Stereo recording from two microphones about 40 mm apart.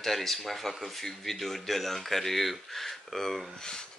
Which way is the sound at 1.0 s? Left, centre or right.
Centre.